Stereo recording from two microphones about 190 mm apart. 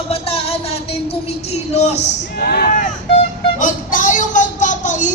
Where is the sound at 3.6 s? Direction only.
40° left (ahead or behind).